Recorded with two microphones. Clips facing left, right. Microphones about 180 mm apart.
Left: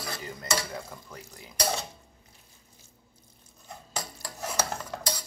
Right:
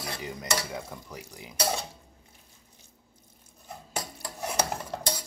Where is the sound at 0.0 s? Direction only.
15° right (ahead or behind).